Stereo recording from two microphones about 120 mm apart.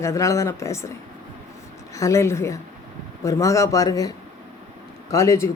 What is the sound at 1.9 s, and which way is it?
Speech, 25° left (ahead or behind).